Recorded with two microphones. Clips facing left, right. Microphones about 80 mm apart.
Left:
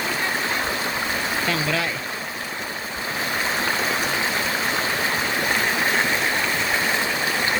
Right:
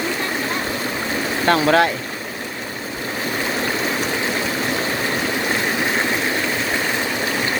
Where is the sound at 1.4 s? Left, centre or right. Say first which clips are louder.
Right 12 dB; right.